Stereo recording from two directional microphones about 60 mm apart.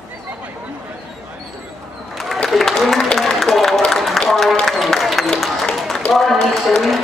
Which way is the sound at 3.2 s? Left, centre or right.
Centre.